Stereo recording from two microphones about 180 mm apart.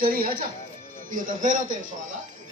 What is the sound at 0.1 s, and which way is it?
A man's voice, 50° right (ahead or behind).